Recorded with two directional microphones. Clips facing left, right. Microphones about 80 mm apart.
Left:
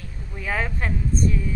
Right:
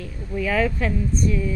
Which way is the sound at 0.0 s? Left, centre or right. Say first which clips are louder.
Right 7 dB; left.